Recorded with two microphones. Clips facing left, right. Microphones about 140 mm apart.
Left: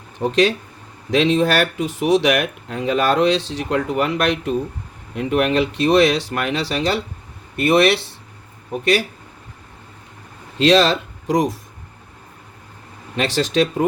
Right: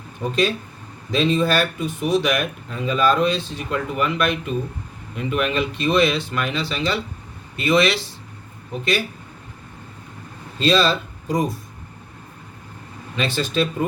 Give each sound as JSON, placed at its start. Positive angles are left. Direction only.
{"t": 0.2, "sound": "speech", "side_deg": 55}
{"t": 1.1, "sound": "speech", "side_deg": 85}
{"t": 10.6, "sound": "speech", "side_deg": 85}
{"t": 13.1, "sound": "speech", "side_deg": 75}